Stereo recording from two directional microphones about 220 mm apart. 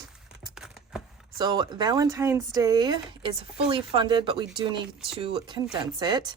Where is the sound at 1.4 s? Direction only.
20° right (ahead or behind).